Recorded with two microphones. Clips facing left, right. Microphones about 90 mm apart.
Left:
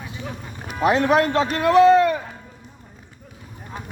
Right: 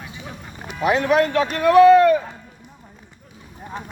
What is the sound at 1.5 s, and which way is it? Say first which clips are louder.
Speech: right 3 dB; 25° left (ahead or behind).